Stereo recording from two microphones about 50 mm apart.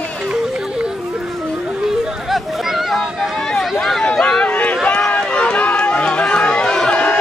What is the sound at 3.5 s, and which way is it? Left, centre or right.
Run, centre.